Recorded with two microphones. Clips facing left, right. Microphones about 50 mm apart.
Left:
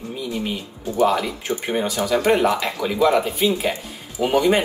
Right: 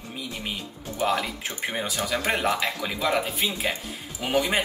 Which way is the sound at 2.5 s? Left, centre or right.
Centre.